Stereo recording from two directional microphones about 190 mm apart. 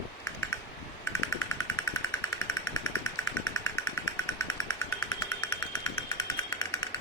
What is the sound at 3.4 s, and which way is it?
Jackhammer, 15° left (ahead or behind).